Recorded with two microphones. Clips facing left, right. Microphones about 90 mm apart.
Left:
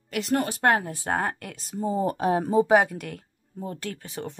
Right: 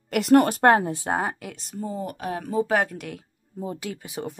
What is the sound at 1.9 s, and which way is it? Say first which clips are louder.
Speech: left 7 dB; 30° left (ahead or behind).